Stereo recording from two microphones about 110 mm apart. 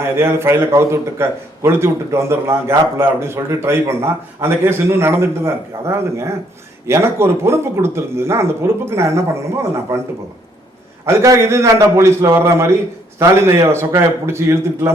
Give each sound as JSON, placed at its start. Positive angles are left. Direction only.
{"t": 0.0, "sound": "a man's voice", "side_deg": -25}